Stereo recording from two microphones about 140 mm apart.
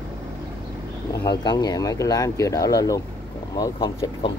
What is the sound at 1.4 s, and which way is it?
Speech, 25° left (ahead or behind).